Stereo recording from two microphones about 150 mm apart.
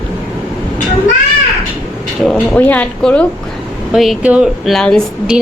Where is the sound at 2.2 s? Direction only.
5° left (ahead or behind).